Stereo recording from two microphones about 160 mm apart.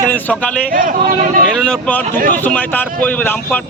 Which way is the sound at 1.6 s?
5° left (ahead or behind).